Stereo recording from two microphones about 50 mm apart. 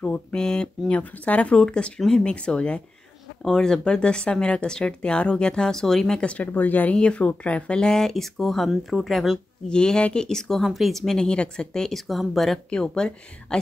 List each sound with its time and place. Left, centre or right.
0.0 s speech: left
6.2 s speech: left
7.0 s speech: left
7.8 s a woman's voice: centre
9.7 s speech: centre
10.6 s a woman's voice: centre
12.6 s speech: centre